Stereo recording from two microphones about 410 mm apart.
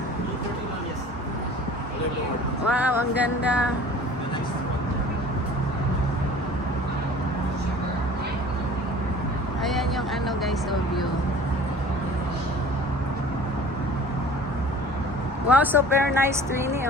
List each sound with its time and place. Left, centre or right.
2.6 s speech: centre
15.4 s speech: centre